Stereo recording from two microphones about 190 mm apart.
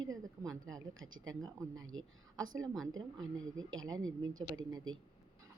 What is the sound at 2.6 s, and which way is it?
Speech, centre (ahead or behind).